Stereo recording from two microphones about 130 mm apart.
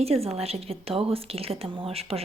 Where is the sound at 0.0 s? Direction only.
50° right (ahead or behind).